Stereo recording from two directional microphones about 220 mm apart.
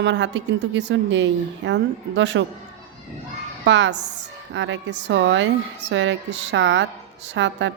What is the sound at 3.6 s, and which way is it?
A woman's voice, 55° right (ahead or behind).